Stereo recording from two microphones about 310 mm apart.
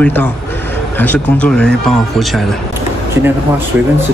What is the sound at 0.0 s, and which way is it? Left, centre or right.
Speech, centre.